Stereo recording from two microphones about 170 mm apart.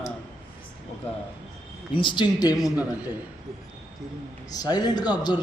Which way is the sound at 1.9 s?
30° left (ahead or behind).